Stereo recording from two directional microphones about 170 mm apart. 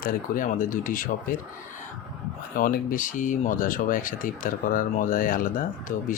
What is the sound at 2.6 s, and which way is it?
Speech, 55° left (ahead or behind).